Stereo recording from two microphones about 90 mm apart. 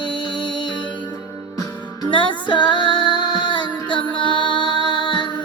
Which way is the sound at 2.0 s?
65° left (ahead or behind).